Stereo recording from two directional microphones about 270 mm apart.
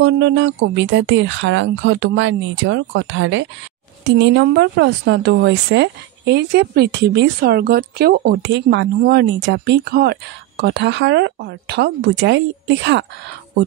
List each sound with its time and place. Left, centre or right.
0.0 s speech: right